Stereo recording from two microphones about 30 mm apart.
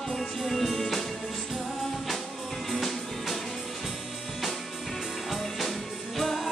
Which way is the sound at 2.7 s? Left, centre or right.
Centre.